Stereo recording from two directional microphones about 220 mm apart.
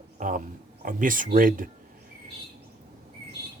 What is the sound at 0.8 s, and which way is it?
Speech, 40° right (ahead or behind).